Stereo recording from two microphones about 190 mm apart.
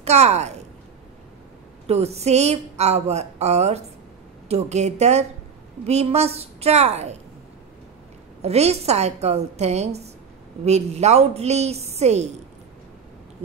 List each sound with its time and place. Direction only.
0.0 s a woman's voice: 35° right (ahead or behind)
1.9 s a woman's voice: 35° right (ahead or behind)
8.4 s a woman's voice: 35° right (ahead or behind)